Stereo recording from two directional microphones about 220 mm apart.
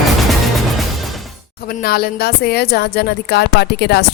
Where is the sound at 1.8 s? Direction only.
45° left (ahead or behind).